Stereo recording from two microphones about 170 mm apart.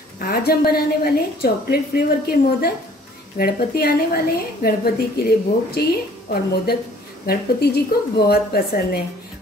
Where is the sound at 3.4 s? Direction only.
65° left (ahead or behind).